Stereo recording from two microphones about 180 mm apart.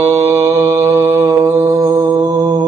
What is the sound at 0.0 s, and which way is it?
Mantra, 15° right (ahead or behind).